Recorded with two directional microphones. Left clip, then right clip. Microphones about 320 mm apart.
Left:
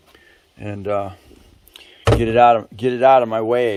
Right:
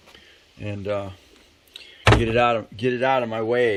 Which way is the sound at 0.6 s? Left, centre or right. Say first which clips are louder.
Left 5 dB; centre.